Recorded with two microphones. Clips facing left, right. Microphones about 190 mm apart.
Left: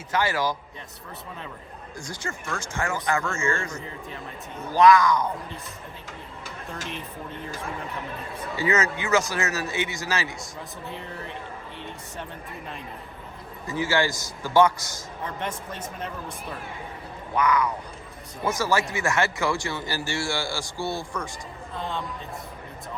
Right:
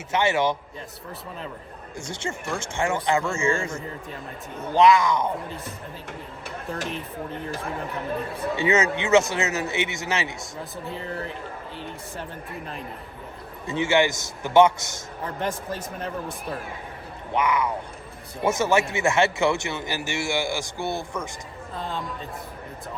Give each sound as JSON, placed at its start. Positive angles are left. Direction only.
{"t": 0.1, "sound": "speech", "side_deg": -25}
{"t": 2.0, "sound": "speech", "side_deg": -25}
{"t": 6.1, "sound": "speech", "side_deg": -60}
{"t": 8.5, "sound": "speech", "side_deg": -25}
{"t": 13.7, "sound": "speech", "side_deg": -25}
{"t": 17.3, "sound": "speech", "side_deg": -25}
{"t": 21.8, "sound": "speech", "side_deg": 0}